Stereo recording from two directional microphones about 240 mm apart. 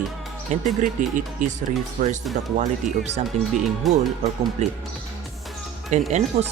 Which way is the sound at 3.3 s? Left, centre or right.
Right.